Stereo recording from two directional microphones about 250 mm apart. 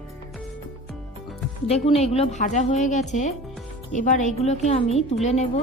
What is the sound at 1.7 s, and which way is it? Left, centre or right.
A woman's voice, left.